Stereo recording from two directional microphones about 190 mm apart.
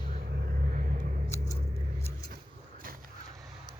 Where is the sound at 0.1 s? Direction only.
50° right (ahead or behind).